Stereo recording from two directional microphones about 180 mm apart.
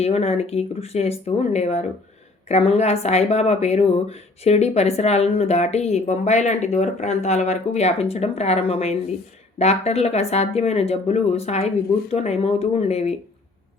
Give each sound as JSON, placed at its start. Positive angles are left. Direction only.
{"t": 0.0, "sound": "a woman's voice", "side_deg": 35}